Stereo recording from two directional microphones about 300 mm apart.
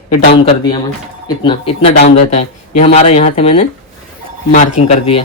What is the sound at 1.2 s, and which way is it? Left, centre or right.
Speech, centre.